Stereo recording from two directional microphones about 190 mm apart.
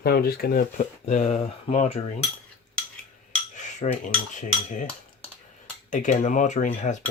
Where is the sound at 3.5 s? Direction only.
40° left (ahead or behind).